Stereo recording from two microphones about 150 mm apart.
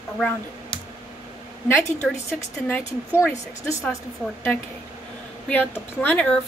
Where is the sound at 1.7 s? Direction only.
5° left (ahead or behind).